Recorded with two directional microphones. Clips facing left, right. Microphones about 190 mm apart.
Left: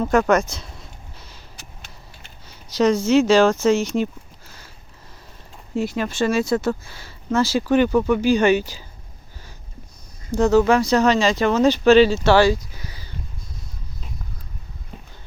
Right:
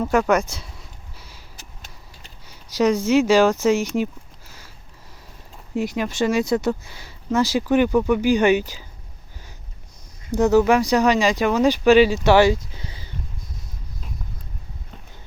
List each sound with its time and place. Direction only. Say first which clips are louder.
0.0 s speech: left 1 dB; 10° right (ahead or behind)
2.5 s speech: left 1 dB; 10° right (ahead or behind)
5.7 s speech: even; 15° right (ahead or behind)
10.3 s speech: even; 15° right (ahead or behind)